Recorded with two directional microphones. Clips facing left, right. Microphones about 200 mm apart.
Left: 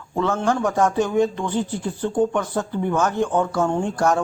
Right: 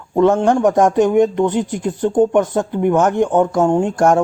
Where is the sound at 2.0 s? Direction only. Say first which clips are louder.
Right 7 dB; 45° right (ahead or behind).